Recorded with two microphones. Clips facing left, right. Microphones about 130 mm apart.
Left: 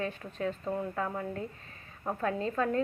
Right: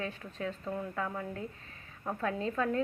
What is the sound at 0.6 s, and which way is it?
A woman's voice, 20° left (ahead or behind).